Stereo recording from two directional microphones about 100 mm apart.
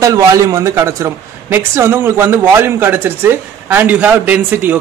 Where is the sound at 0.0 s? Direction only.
35° right (ahead or behind).